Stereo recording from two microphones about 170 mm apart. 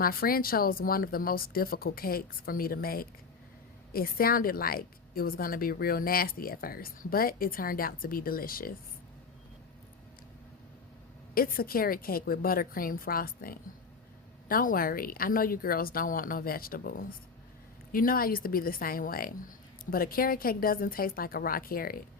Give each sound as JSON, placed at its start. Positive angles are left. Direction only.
{"t": 0.0, "sound": "a woman's voice", "side_deg": 60}
{"t": 11.3, "sound": "a woman's voice", "side_deg": 60}